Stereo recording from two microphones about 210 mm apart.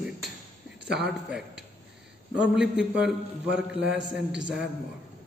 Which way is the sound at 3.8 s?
60° right (ahead or behind).